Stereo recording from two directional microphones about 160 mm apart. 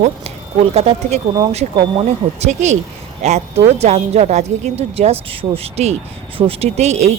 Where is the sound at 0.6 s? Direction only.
40° right (ahead or behind).